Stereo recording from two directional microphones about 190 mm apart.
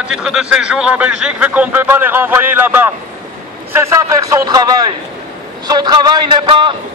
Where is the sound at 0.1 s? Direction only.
Centre (ahead or behind); by 4.6 s 15° right (ahead or behind).